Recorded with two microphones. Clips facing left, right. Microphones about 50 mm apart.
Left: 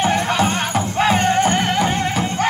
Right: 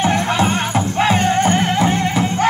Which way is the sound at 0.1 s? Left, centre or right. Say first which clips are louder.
Right 1 dB; centre.